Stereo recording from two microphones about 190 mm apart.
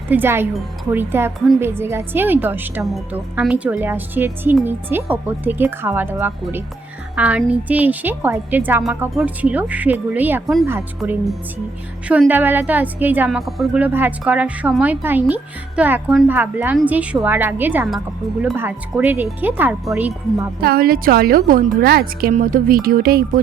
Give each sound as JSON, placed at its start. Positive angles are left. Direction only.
{"t": 0.1, "sound": "a woman's voice", "side_deg": -10}
{"t": 20.6, "sound": "a woman's voice", "side_deg": -55}